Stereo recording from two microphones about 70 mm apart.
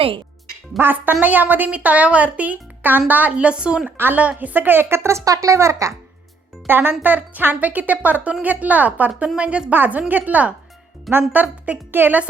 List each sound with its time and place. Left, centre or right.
0.8 s a woman's voice: right; by 3.9 s centre
3.9 s a woman's voice: right
6.7 s a woman's voice: right